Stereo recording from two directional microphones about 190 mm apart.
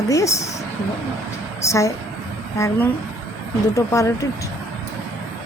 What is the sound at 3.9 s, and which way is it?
Speech, 15° left (ahead or behind).